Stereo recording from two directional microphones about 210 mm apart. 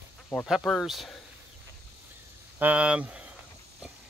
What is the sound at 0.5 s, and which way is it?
Speech, centre (ahead or behind).